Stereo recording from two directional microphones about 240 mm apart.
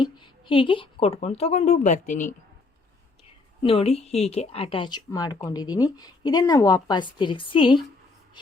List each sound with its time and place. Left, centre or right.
0.4 s speech: left
3.6 s speech: left